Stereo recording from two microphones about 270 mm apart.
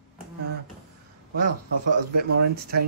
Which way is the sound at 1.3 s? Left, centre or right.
Right.